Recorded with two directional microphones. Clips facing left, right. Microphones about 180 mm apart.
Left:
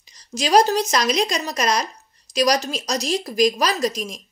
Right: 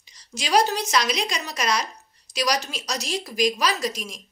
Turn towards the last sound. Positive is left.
turn(degrees=40)  # may be behind; listen again after turning